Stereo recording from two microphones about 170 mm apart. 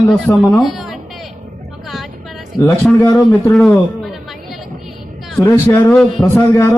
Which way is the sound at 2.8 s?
10° left (ahead or behind).